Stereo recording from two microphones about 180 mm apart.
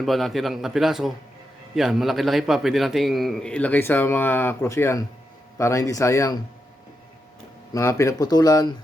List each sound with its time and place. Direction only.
0.0 s a man's voice: centre (ahead or behind); by 6.4 s 15° left (ahead or behind)
7.7 s speech: 15° left (ahead or behind)